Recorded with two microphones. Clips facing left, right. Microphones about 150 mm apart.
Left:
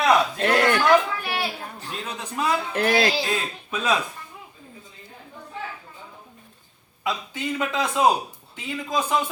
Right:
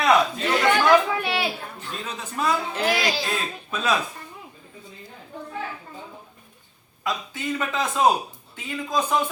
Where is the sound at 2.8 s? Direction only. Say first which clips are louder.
Left 3 dB; 60° left (ahead or behind).